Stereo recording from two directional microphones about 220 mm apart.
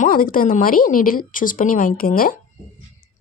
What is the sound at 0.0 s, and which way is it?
Speech, 40° left (ahead or behind).